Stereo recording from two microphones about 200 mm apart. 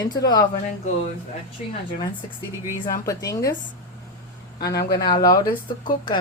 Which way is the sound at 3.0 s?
15° left (ahead or behind).